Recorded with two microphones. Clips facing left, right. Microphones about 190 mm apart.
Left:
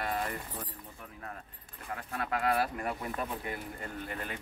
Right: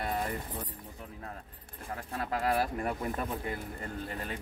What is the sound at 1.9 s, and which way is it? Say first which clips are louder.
Speech: even; 30° right (ahead or behind).